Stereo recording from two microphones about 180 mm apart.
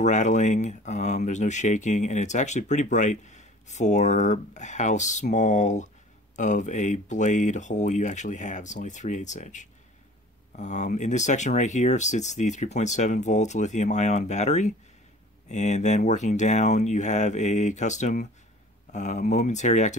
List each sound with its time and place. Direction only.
0.0 s speech: 40° left (ahead or behind)